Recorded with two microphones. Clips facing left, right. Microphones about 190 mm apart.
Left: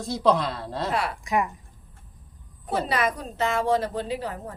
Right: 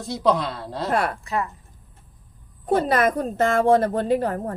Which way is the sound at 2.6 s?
50° right (ahead or behind).